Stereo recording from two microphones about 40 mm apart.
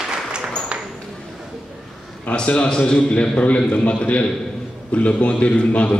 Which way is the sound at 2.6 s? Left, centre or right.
Left.